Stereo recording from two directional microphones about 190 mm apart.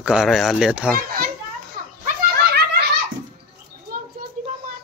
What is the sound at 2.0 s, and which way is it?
Snicker, 55° right (ahead or behind).